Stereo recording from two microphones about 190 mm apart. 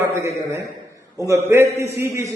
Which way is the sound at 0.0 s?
15° right (ahead or behind).